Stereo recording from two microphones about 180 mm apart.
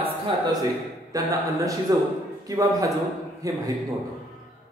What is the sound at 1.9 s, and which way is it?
A man's voice, 20° right (ahead or behind).